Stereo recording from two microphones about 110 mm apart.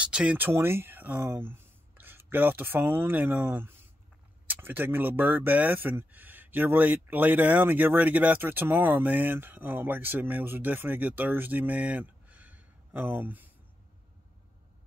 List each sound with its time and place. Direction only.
0.0 s speech: 10° right (ahead or behind)
0.5 s speech: 20° right (ahead or behind)